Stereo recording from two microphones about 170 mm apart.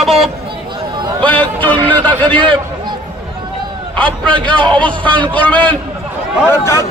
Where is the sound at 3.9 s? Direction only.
5° left (ahead or behind).